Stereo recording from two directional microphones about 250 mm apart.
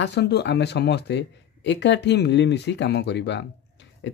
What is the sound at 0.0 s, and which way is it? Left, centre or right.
Speech, left.